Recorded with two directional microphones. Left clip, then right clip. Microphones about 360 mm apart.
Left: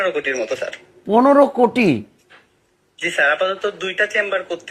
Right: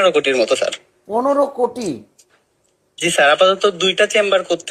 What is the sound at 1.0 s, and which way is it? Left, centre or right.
Speech, left.